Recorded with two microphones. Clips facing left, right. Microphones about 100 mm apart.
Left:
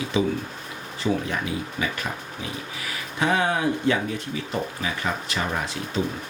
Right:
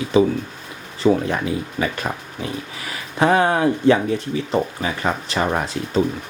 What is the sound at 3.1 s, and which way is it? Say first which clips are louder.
Speech: right 6 dB; 45° right (ahead or behind).